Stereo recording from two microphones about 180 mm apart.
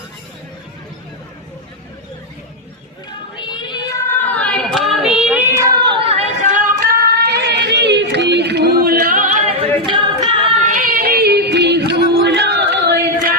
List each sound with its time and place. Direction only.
3.4 s child singing: 20° left (ahead or behind); by 6.2 s 30° right (ahead or behind)
6.5 s music: 45° right (ahead or behind)
7.3 s a sound: 70° right (ahead or behind); by 10.5 s 25° right (ahead or behind)
10.9 s yodeling: 60° right (ahead or behind)